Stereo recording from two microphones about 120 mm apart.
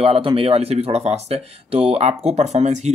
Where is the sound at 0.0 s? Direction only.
55° right (ahead or behind).